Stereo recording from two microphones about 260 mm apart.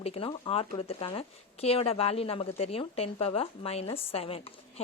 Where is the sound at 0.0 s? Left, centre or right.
Left.